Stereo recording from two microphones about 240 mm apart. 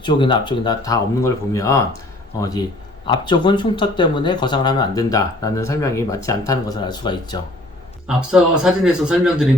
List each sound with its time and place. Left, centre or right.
0.0 s speech: centre
3.1 s speech: centre
8.0 s speech: centre